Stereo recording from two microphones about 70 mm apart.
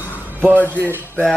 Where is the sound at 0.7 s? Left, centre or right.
Right.